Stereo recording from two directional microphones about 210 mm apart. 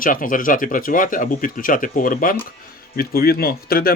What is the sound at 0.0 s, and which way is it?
Speech, 40° left (ahead or behind).